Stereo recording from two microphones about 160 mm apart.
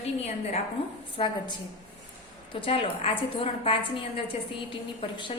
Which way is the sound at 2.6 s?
35° left (ahead or behind).